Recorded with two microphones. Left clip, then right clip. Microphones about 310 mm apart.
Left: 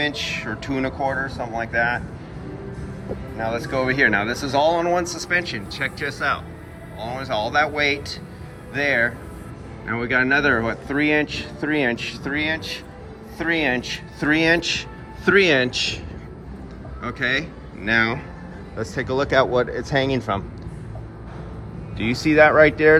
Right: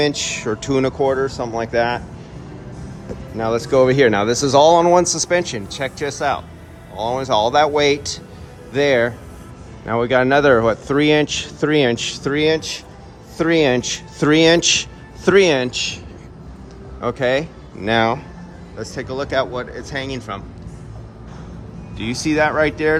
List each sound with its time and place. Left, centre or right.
0.0 s speech: right
3.5 s a man's voice: right
17.0 s speech: centre
21.9 s a man's voice: centre